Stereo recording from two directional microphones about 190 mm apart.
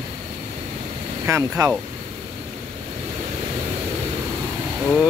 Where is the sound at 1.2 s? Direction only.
15° right (ahead or behind).